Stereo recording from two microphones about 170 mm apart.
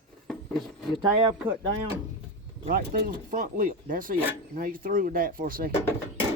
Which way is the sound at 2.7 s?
60° right (ahead or behind).